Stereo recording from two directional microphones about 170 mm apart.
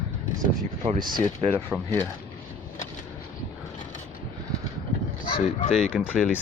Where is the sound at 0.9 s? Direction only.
50° right (ahead or behind).